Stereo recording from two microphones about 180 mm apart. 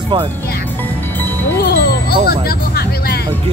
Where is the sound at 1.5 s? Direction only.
60° left (ahead or behind).